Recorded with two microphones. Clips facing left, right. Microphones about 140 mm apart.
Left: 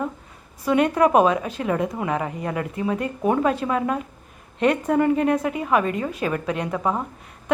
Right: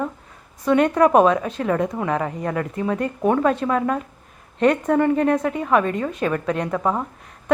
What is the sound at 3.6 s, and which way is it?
Speech, 20° left (ahead or behind).